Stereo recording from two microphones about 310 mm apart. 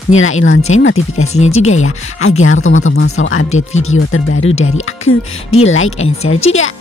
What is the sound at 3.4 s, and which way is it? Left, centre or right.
Speech, left.